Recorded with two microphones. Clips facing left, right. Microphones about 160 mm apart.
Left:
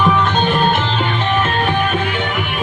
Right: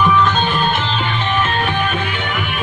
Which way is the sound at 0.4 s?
55° left (ahead or behind).